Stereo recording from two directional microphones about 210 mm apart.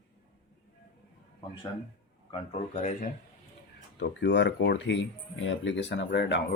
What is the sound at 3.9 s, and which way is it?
Speech, 60° left (ahead or behind).